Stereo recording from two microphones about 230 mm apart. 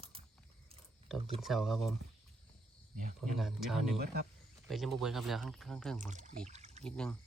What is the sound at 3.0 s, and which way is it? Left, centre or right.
Speech, right.